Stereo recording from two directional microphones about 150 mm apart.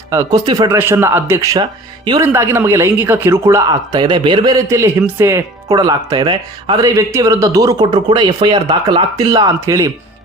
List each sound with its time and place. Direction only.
0.1 s speech: 20° right (ahead or behind)